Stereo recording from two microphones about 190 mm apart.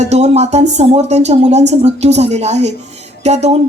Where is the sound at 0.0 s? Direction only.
35° right (ahead or behind).